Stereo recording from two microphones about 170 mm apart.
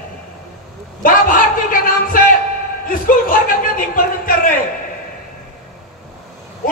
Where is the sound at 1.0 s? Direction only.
55° left (ahead or behind).